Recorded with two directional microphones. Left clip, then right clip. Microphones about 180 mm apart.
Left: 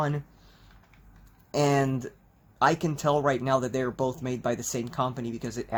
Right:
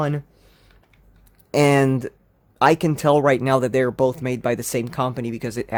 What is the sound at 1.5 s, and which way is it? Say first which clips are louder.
Speech: right 8 dB; 60° right (ahead or behind).